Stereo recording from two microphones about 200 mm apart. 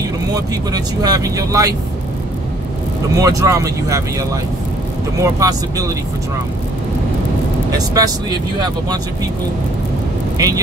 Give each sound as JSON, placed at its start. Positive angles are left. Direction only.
{"t": 0.3, "sound": "speech", "side_deg": -20}
{"t": 3.2, "sound": "speech", "side_deg": -15}
{"t": 7.7, "sound": "speech", "side_deg": -20}
{"t": 10.3, "sound": "speech", "side_deg": -15}